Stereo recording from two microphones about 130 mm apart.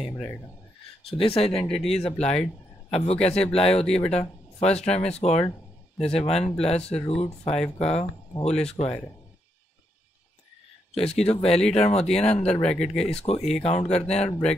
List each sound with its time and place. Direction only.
1.1 s speech: 45° left (ahead or behind)
1.5 s speech: 5° left (ahead or behind)
2.9 s speech: 55° left (ahead or behind)
3.8 s speech: 5° left (ahead or behind)
4.1 s speech: 55° left (ahead or behind)
6.8 s speech: 5° left (ahead or behind)
7.2 s speech: 50° left (ahead or behind)
11.2 s speech: 50° left (ahead or behind)
12.6 s speech: 5° left (ahead or behind)
13.1 s speech: 50° left (ahead or behind)
13.4 s speech: 5° left (ahead or behind)
13.7 s speech: 55° left (ahead or behind)